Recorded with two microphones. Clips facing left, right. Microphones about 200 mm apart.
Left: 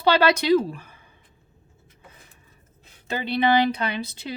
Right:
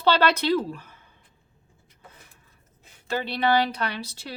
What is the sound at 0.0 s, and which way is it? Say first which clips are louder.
Speech: left 2 dB; 10° left (ahead or behind).